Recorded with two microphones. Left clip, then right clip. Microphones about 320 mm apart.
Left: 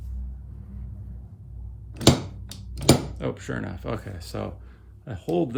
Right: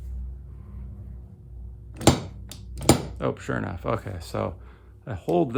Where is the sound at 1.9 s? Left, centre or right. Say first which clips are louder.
Left 1 dB; centre.